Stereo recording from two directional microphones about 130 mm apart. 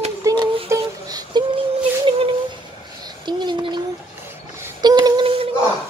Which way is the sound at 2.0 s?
45° right (ahead or behind).